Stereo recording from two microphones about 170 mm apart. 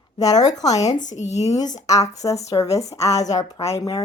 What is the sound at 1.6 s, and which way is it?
Speech, 25° left (ahead or behind).